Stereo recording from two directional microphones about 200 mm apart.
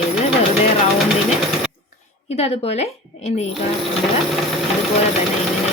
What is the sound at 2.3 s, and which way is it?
A woman's voice, 30° left (ahead or behind).